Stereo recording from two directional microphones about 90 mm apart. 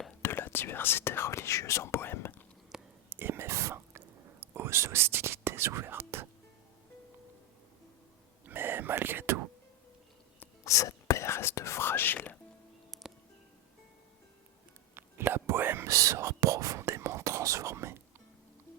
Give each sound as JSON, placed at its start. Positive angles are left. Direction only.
{"t": 0.2, "sound": "speech", "side_deg": 25}
{"t": 2.7, "sound": "whispering", "side_deg": -5}
{"t": 3.1, "sound": "whispering", "side_deg": -25}
{"t": 8.4, "sound": "whispering", "side_deg": -25}
{"t": 10.6, "sound": "whispering", "side_deg": 35}
{"t": 12.9, "sound": "music", "side_deg": 0}
{"t": 14.9, "sound": "whispering", "side_deg": -25}
{"t": 15.9, "sound": "whispering", "side_deg": -35}